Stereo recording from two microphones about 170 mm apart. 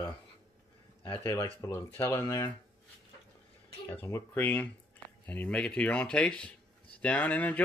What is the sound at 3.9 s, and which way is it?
Speech, 15° left (ahead or behind).